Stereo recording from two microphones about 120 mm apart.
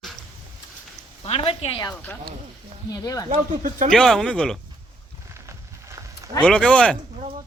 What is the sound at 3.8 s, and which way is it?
Speech, 5° left (ahead or behind).